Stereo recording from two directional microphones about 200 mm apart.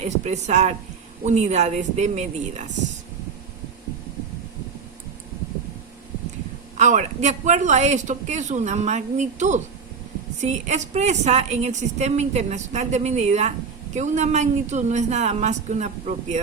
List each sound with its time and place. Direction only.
0.0 s a woman's voice: 35° right (ahead or behind)
6.7 s a woman's voice: 35° right (ahead or behind)